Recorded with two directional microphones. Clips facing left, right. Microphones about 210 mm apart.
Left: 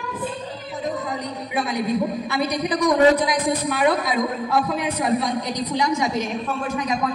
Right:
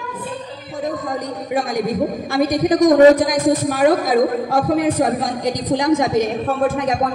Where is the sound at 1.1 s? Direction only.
45° right (ahead or behind).